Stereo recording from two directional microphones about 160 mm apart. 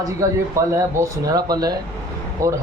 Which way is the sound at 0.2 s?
20° right (ahead or behind).